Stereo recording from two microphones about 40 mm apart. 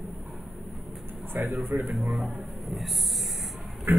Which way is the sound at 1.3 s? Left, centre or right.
Right.